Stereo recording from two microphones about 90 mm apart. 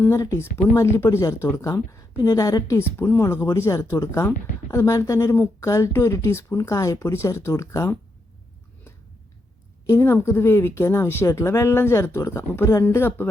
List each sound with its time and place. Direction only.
0.0 s speech: 35° left (ahead or behind)
0.5 s speech: 20° left (ahead or behind)
1.2 s speech: 40° left (ahead or behind)
3.0 s speech: 30° left (ahead or behind)
5.3 s speech: 25° left (ahead or behind)
5.6 s speech: 35° left (ahead or behind)
9.8 s speech: 30° left (ahead or behind)